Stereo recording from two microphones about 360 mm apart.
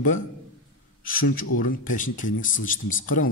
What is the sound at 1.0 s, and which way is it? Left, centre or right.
Speech, left.